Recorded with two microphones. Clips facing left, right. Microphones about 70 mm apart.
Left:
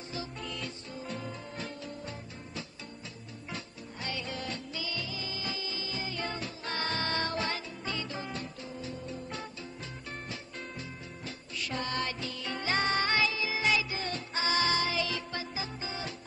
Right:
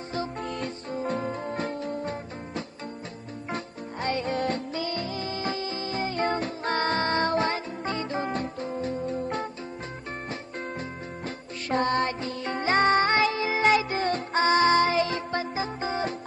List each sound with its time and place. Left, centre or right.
0.1 s music: right
10.8 s music: right